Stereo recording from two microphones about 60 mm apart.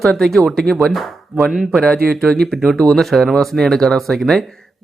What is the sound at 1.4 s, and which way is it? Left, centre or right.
Speech, centre.